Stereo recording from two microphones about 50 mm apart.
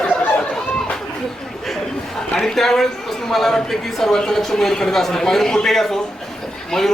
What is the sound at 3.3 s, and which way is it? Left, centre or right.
A man's voice, centre.